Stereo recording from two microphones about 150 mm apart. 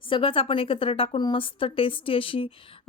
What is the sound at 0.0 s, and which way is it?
A woman's voice, 35° left (ahead or behind).